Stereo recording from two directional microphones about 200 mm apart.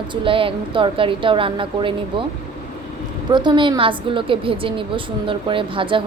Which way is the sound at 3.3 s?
20° right (ahead or behind).